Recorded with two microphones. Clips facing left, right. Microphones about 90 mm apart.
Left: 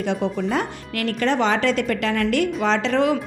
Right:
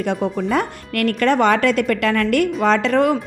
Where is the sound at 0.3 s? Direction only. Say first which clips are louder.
Right 3 dB; 50° right (ahead or behind).